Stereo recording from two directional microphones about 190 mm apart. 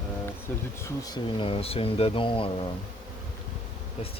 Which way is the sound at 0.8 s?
20° left (ahead or behind).